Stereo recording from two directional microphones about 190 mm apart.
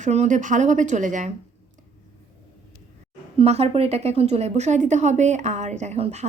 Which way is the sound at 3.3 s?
35° right (ahead or behind).